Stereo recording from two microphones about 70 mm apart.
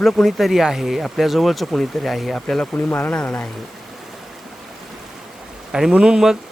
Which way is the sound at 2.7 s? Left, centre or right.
Left.